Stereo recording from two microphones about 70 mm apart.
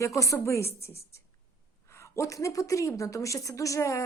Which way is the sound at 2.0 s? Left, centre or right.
Left.